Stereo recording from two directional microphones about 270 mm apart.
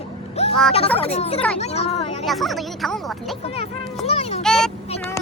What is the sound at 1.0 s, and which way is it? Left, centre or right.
A child's voice, left.